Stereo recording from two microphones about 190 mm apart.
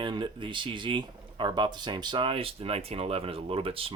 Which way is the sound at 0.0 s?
25° right (ahead or behind).